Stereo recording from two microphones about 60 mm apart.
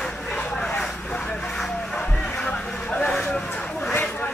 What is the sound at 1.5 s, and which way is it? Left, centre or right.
Music, centre.